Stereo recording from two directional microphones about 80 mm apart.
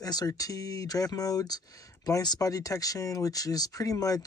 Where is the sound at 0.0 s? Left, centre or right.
Left.